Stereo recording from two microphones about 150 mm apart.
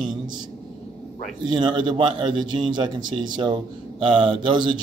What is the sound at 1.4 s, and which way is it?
A man's voice, 30° right (ahead or behind).